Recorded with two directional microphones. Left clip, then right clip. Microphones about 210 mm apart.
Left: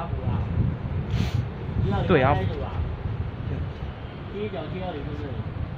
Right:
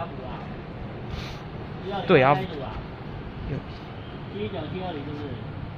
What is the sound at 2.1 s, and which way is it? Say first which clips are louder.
Speech: right 3 dB; 25° right (ahead or behind).